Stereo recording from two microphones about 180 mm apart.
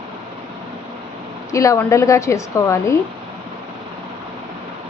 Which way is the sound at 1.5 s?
15° left (ahead or behind).